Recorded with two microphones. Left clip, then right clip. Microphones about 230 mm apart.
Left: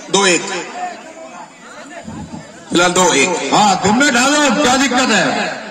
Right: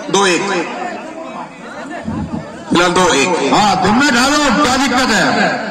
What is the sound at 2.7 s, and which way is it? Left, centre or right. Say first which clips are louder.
A man's voice: right 1 dB; left.